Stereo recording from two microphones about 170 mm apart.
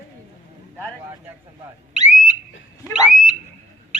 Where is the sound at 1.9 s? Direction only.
45° right (ahead or behind).